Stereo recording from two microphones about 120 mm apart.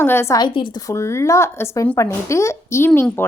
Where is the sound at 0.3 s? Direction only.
40° left (ahead or behind).